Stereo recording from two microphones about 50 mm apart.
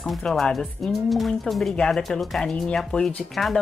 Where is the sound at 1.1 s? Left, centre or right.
Centre.